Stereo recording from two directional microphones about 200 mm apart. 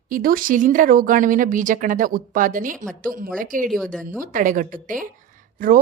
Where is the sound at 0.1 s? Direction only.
45° right (ahead or behind).